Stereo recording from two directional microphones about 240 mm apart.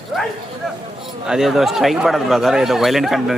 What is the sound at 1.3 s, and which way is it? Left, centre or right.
Speech, centre.